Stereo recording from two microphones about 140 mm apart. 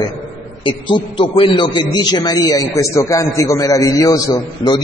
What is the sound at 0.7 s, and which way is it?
A man's voice, 35° left (ahead or behind).